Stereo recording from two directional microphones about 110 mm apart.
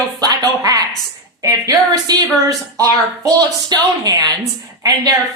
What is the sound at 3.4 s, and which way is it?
Speech, 35° right (ahead or behind).